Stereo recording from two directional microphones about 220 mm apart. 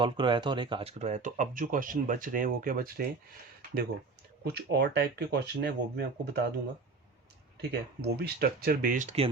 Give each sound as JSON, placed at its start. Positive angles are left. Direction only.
{"t": 0.0, "sound": "speech", "side_deg": -20}
{"t": 4.4, "sound": "speech", "side_deg": -45}
{"t": 7.7, "sound": "speech", "side_deg": -45}